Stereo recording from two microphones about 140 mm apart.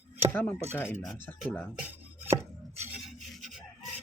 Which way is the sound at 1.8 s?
10° right (ahead or behind).